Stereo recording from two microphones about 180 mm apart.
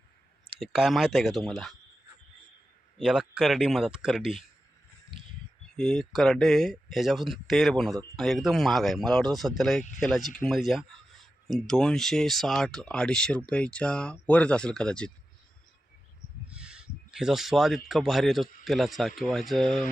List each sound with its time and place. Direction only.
0.6 s speech: centre (ahead or behind)
3.0 s speech: 5° right (ahead or behind)
5.7 s speech: 5° left (ahead or behind)
16.5 s a sound: 5° right (ahead or behind)
17.8 s speech: centre (ahead or behind)